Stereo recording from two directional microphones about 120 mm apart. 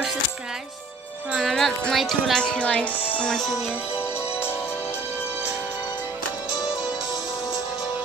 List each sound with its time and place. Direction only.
1.3 s speech: centre (ahead or behind)
3.1 s music: 10° left (ahead or behind)
4.0 s music: 20° left (ahead or behind)